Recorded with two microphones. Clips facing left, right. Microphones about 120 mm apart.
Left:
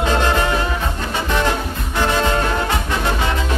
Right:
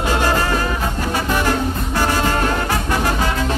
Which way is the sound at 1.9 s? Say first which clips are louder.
Left 1 dB; 20° left (ahead or behind).